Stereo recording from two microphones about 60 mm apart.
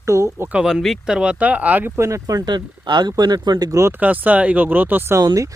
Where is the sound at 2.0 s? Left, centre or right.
Right.